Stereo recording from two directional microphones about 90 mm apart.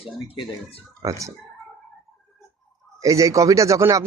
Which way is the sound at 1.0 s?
35° right (ahead or behind).